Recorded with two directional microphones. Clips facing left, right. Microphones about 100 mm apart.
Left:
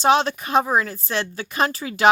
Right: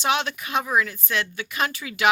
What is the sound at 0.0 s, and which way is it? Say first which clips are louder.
Speech: left 6 dB; 35° left (ahead or behind).